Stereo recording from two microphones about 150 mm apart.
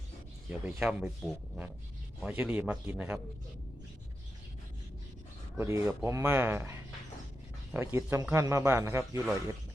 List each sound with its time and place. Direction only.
0.5 s a man's voice: 5° right (ahead or behind)
5.5 s a man's voice: 15° right (ahead or behind)